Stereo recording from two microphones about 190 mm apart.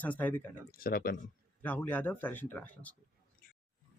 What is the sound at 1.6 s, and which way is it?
A man's voice, 10° left (ahead or behind).